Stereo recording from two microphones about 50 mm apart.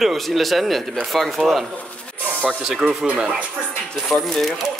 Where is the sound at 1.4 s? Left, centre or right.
Centre.